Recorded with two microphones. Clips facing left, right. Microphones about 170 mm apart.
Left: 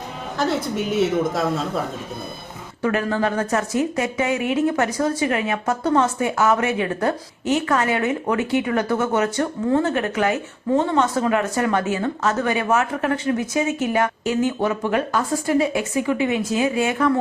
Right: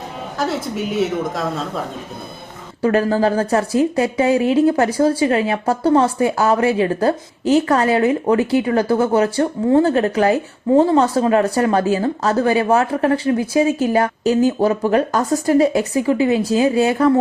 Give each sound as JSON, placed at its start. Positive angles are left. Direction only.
{"t": 0.9, "sound": "speech", "side_deg": 0}
{"t": 2.8, "sound": "speech", "side_deg": -35}